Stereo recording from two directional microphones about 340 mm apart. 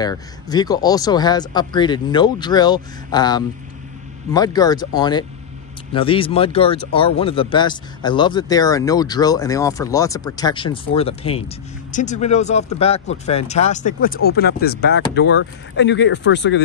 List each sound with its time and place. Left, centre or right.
0.0 s speech: centre; by 16.6 s left